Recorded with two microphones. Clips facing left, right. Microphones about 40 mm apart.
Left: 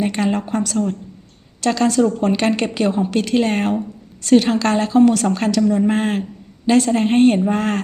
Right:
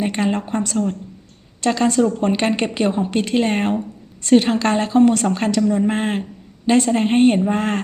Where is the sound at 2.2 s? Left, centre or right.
Right.